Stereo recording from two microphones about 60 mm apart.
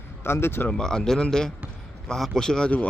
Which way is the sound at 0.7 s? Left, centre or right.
Centre.